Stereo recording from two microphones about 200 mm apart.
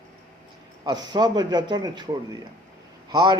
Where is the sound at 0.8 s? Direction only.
20° right (ahead or behind).